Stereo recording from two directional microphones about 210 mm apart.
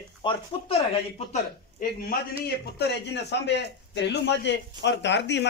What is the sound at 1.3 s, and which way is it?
Speech, 40° left (ahead or behind).